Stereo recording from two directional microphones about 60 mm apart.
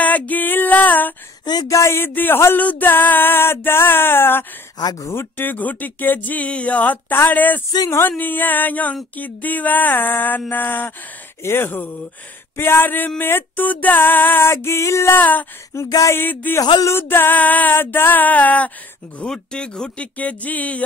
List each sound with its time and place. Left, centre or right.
0.0 s female singing: left
1.7 s speech: left
2.0 s music: left
5.1 s speech: left
7.2 s music: left
9.1 s speech: left
10.5 s music: left
15.1 s music: left
15.7 s a sound: left
16.1 s music: left
16.5 s a sound: left
17.1 s speech: left
19.1 s speech: centre